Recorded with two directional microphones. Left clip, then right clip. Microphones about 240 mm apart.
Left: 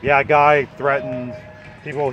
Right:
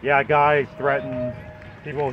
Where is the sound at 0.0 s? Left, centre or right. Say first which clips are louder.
Left 4 dB; centre.